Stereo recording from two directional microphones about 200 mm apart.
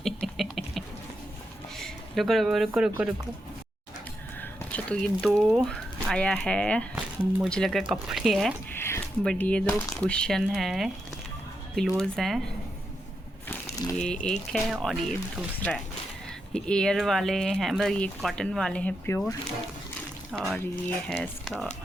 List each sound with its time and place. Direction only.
0.0 s a sound: centre (ahead or behind)
1.8 s speech: centre (ahead or behind)
4.4 s speech: 5° left (ahead or behind)
8.7 s speech: 10° left (ahead or behind)
13.5 s crushing: 20° left (ahead or behind)
14.0 s speech: 5° left (ahead or behind)
20.3 s speech: centre (ahead or behind)